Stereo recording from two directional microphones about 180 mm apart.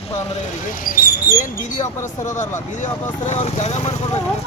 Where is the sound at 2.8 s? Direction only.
40° left (ahead or behind).